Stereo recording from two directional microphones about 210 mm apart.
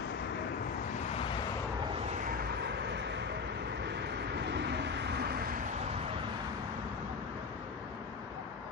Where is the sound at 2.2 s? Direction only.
45° right (ahead or behind).